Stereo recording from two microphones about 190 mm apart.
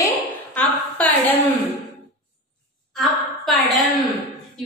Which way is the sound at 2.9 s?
Centre (ahead or behind).